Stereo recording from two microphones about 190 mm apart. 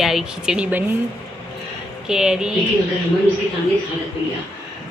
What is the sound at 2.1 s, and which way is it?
Speech, 5° right (ahead or behind).